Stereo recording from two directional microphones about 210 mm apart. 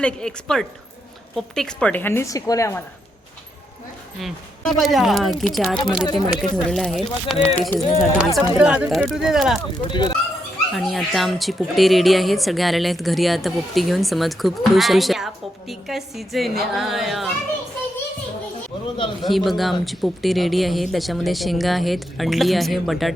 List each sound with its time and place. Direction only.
0.0 s a woman's voice: 5° left (ahead or behind)
4.2 s speech: centre (ahead or behind)
9.8 s speech: 20° left (ahead or behind)
10.7 s speech: centre (ahead or behind)
19.2 s speech: centre (ahead or behind)